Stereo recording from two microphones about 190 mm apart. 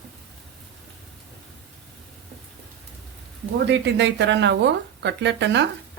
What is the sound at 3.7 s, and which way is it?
Speech, 65° right (ahead or behind).